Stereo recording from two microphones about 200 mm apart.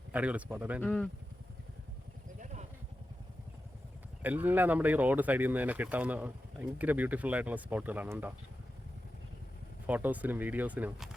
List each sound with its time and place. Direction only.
0.1 s speech: 5° right (ahead or behind)
0.8 s speech: 5° left (ahead or behind)
2.4 s vehicle: 35° right (ahead or behind)
4.2 s speech: 10° right (ahead or behind)
9.8 s speech: 10° right (ahead or behind)